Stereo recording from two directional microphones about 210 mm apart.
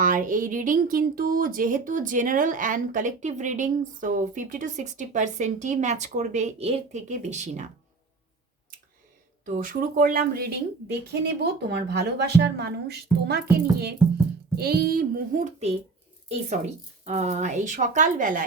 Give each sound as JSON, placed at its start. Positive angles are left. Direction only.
{"t": 0.0, "sound": "speech", "side_deg": -40}
{"t": 9.6, "sound": "speech", "side_deg": -40}